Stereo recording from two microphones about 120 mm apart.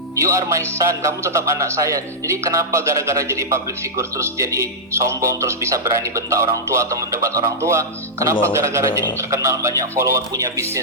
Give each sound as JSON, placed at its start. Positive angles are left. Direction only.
{"t": 0.2, "sound": "a man's voice", "side_deg": -25}